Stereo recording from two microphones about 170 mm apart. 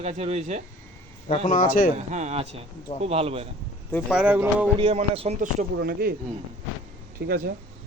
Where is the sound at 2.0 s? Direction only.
45° right (ahead or behind).